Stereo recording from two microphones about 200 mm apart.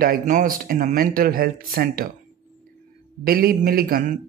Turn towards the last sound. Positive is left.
turn(degrees=-45)  # may be behind; listen again after turning